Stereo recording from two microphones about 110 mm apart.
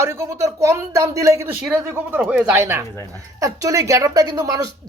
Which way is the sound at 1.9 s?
20° right (ahead or behind).